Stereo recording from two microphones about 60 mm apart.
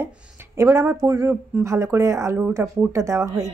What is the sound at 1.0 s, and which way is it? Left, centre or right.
Speech, right.